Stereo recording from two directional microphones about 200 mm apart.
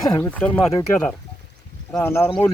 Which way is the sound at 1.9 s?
10° left (ahead or behind).